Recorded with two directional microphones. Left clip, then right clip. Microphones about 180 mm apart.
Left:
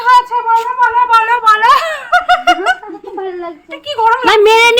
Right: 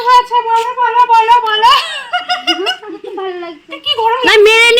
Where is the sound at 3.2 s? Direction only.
35° right (ahead or behind).